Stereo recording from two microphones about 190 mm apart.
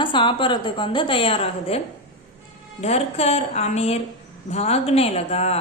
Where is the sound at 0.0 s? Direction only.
25° left (ahead or behind).